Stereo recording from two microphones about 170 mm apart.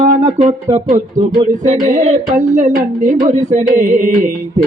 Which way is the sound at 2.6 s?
45° right (ahead or behind).